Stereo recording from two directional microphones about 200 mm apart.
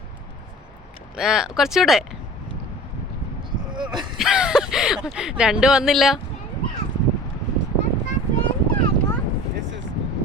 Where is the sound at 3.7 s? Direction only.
25° right (ahead or behind).